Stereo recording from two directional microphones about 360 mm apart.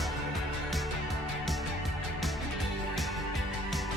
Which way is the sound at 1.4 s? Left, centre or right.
Centre.